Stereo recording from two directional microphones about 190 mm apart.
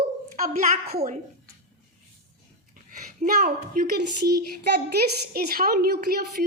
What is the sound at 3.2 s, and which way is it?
A child's voice, 45° right (ahead or behind).